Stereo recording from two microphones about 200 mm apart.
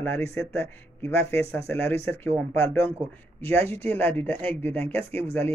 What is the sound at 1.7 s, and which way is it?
Speech, 10° left (ahead or behind).